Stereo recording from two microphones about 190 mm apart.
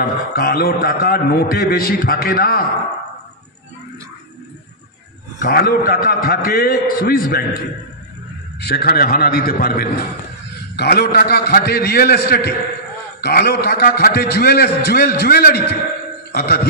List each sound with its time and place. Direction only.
0.3 s a man's voice: 55° left (ahead or behind)
5.4 s a man's voice: 55° left (ahead or behind)
8.5 s a man's voice: 55° left (ahead or behind)